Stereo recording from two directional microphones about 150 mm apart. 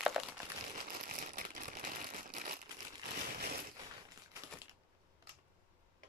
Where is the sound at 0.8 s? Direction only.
70° right (ahead or behind).